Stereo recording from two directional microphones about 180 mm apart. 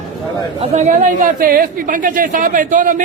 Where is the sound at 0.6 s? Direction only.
40° right (ahead or behind).